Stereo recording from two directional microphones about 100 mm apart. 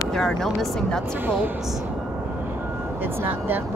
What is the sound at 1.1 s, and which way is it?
Speech, 20° right (ahead or behind).